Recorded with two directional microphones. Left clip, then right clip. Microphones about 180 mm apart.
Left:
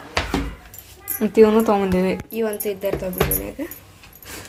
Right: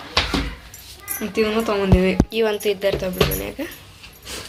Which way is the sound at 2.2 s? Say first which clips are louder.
Right 4 dB; centre (ahead or behind).